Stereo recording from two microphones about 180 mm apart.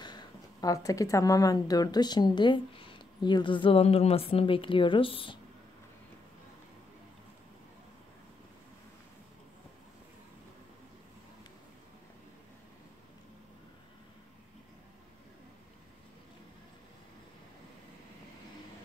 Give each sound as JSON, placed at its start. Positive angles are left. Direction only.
{"t": 0.0, "sound": "speech", "side_deg": 25}